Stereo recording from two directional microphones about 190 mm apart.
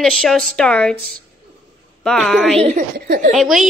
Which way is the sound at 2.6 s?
45° right (ahead or behind).